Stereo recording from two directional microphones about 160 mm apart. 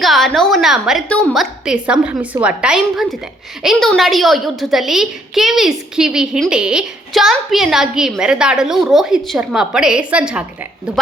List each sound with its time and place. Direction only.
0.0 s a child's voice: centre (ahead or behind)